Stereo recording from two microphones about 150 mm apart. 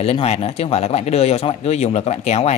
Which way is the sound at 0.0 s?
40° left (ahead or behind).